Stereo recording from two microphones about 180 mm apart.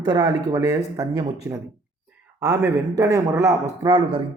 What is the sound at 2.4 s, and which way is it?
A man's voice, 15° right (ahead or behind).